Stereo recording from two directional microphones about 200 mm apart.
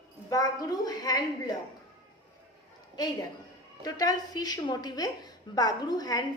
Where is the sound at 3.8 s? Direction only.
20° left (ahead or behind).